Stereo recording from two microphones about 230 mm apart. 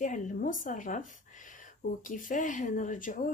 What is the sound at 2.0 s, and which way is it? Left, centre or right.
Speech, left.